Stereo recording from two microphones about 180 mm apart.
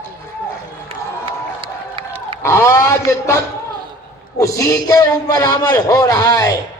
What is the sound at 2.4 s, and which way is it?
Speech, 15° left (ahead or behind).